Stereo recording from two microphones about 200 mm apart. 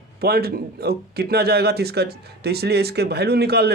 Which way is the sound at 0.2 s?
50° right (ahead or behind).